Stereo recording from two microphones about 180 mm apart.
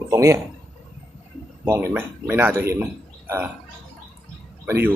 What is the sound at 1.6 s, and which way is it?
Speech, 10° right (ahead or behind).